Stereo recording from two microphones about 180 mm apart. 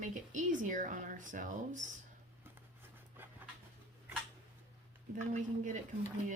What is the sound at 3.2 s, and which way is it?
Dog, 10° right (ahead or behind).